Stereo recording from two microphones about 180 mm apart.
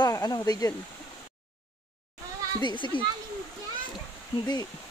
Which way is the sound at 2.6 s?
25° left (ahead or behind).